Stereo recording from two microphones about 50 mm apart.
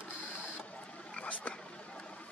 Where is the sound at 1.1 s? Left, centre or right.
Left.